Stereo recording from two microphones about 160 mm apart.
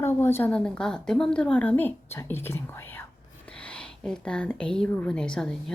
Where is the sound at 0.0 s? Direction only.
15° left (ahead or behind).